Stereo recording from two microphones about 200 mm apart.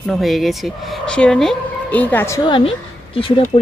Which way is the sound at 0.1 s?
Centre (ahead or behind).